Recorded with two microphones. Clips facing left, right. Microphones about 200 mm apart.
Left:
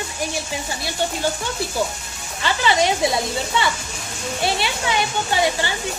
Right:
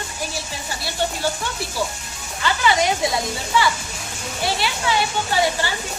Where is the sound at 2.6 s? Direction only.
25° left (ahead or behind).